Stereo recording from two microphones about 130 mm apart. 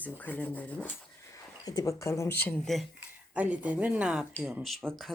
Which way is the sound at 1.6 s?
30° left (ahead or behind).